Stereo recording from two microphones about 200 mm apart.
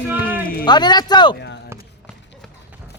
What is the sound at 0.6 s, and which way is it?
Speech, 20° left (ahead or behind).